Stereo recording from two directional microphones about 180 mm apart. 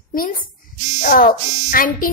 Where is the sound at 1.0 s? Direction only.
50° left (ahead or behind).